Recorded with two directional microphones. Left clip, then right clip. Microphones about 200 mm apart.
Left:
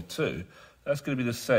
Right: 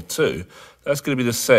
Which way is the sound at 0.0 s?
40° right (ahead or behind).